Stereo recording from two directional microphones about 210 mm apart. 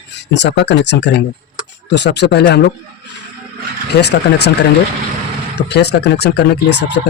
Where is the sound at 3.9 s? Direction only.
50° left (ahead or behind).